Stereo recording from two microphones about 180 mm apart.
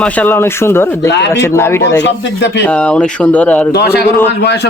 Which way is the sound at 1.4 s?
15° left (ahead or behind).